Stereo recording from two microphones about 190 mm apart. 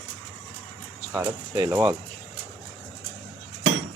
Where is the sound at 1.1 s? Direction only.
15° right (ahead or behind).